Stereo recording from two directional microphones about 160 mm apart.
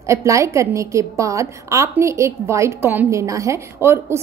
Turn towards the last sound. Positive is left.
turn(degrees=-15)  # may be behind; listen again after turning